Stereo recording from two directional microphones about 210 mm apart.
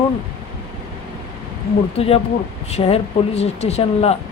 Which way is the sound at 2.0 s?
30° left (ahead or behind).